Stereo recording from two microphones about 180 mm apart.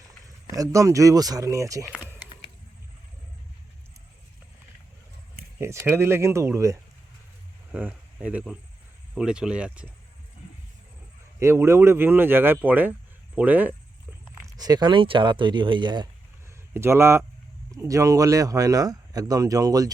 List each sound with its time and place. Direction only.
0.5 s a man's voice: 20° right (ahead or behind)
5.5 s speech: 15° right (ahead or behind)
11.3 s speech: 15° right (ahead or behind)
14.5 s a man's voice: 20° right (ahead or behind)
16.7 s a man's voice: 15° right (ahead or behind)